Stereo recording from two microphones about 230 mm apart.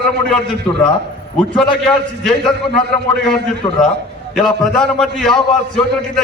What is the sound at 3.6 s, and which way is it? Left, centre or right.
Speech, centre.